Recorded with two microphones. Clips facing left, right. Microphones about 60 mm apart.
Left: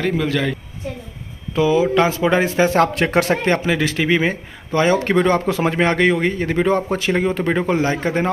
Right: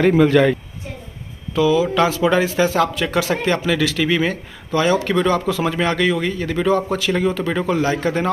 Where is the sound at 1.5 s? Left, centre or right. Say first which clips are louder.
Left 1 dB; left.